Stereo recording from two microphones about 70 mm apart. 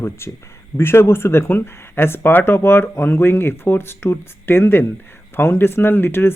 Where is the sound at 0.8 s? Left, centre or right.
Left.